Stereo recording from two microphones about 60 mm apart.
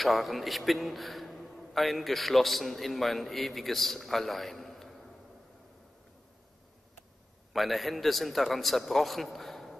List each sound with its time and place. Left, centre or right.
0.0 s a man's voice: centre
7.5 s a man's voice: centre